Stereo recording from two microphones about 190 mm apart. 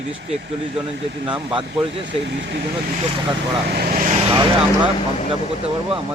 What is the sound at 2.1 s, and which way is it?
Speech, 65° right (ahead or behind).